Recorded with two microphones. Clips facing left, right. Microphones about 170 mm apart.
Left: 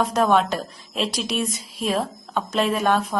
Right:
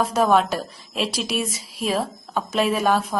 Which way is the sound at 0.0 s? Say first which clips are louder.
Even; centre (ahead or behind).